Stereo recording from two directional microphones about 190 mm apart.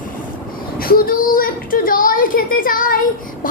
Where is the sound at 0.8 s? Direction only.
50° left (ahead or behind).